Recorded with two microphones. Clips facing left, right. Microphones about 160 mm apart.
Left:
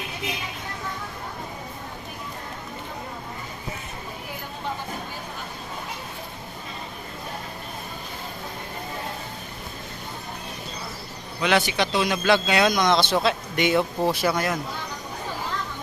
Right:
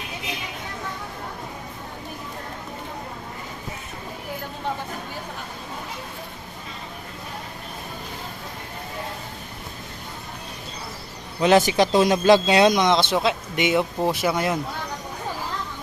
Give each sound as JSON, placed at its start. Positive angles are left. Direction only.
{"t": 11.3, "sound": "a man's voice", "side_deg": -35}
{"t": 12.7, "sound": "speech", "side_deg": -20}